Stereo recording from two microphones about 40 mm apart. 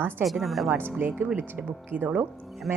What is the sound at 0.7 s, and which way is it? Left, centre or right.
Speech, right.